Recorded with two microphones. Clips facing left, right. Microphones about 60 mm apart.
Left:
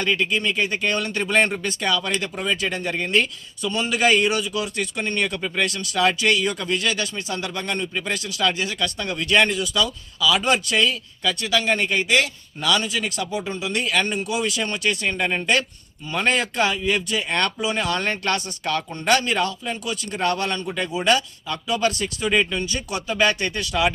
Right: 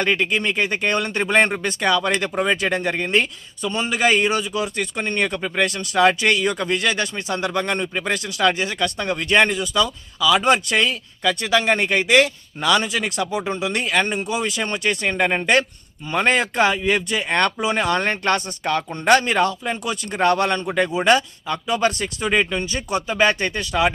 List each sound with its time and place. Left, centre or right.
0.0 s speech: right
13.8 s speech: right